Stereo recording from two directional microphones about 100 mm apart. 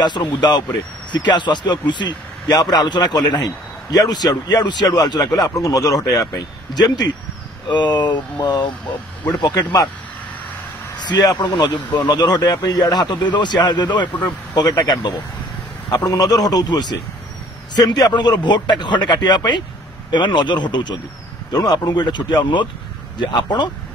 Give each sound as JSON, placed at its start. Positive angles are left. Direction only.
{"t": 0.0, "sound": "a man's voice", "side_deg": 45}
{"t": 11.0, "sound": "a man's voice", "side_deg": 45}